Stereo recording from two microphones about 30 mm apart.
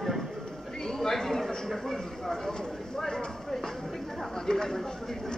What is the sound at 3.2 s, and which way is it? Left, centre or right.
Clip-clop, centre.